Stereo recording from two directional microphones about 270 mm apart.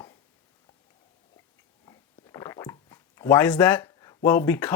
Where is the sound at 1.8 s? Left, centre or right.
Centre.